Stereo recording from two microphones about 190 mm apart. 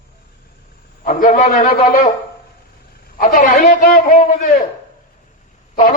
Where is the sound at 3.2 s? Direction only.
45° left (ahead or behind).